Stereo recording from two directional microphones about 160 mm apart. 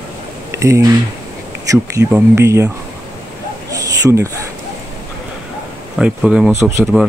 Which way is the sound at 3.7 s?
20° right (ahead or behind).